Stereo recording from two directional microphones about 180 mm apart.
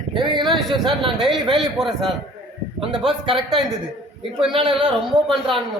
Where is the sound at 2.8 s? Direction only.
30° right (ahead or behind).